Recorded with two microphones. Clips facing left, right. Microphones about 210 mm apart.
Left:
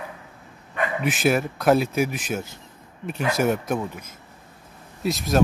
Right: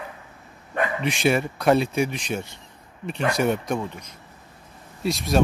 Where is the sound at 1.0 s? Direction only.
Centre (ahead or behind).